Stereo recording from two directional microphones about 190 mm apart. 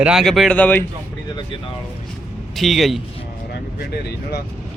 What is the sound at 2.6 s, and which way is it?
Speech, centre (ahead or behind).